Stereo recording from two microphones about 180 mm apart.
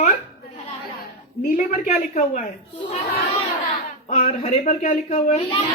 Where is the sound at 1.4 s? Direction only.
50° left (ahead or behind).